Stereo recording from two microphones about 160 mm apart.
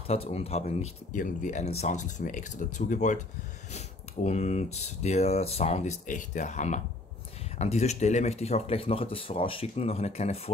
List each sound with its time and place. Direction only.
0.0 s speech: 40° left (ahead or behind)